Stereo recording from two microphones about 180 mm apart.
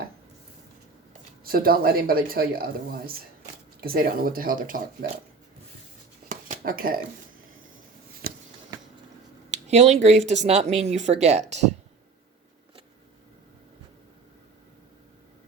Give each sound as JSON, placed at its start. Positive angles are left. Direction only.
{"t": 1.5, "sound": "speech", "side_deg": -55}
{"t": 6.2, "sound": "a sound", "side_deg": -50}
{"t": 9.5, "sound": "speech", "side_deg": -40}